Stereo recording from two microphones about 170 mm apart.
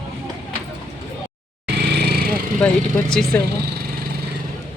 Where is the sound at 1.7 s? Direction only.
70° right (ahead or behind).